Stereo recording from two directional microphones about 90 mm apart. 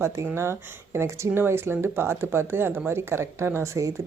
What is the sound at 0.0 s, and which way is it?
Speech, 30° right (ahead or behind).